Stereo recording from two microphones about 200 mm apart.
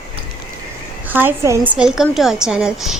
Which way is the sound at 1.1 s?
10° right (ahead or behind).